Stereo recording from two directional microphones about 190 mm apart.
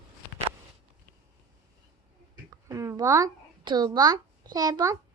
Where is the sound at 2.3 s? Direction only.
15° right (ahead or behind).